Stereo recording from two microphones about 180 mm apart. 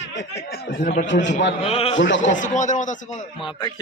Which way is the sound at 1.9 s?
90° left.